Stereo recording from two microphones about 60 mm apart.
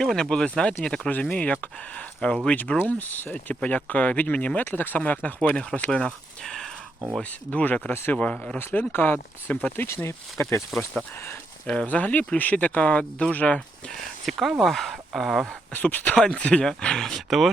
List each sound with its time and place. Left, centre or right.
0.0 s speech: centre; by 3.3 s left
3.3 s speech: centre
7.2 s speech: left
8.5 s speech: left
11.6 s speech: left
13.9 s speech: centre
15.7 s speech: left
16.1 s speech: centre